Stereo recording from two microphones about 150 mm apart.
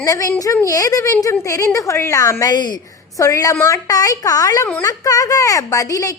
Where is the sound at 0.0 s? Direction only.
20° left (ahead or behind).